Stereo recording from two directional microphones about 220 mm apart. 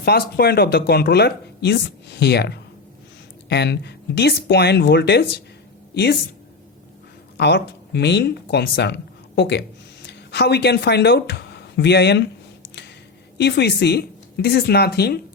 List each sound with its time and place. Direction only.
0.0 s speech: 45° left (ahead or behind)
7.3 s speech: 50° left (ahead or behind)
13.4 s speech: 50° left (ahead or behind)